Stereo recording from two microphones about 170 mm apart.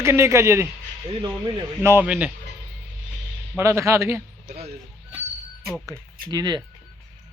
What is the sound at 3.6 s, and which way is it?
Speech, 15° right (ahead or behind).